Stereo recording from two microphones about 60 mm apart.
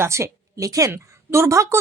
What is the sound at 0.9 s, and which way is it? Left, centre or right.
Speech, right.